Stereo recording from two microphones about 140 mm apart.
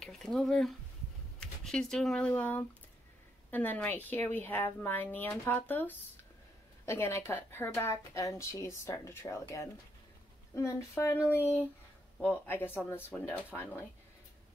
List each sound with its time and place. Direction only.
0.0 s a woman's voice: 5° left (ahead or behind)